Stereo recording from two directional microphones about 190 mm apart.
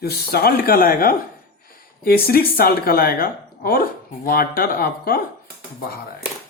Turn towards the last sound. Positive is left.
turn(degrees=55)  # may be behind; listen again after turning